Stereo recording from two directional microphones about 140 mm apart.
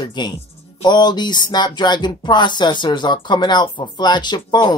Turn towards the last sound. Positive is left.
turn(degrees=30)  # may be behind; listen again after turning